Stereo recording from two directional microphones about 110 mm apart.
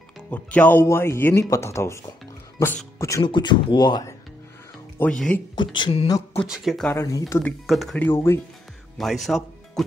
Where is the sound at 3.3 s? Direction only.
45° left (ahead or behind).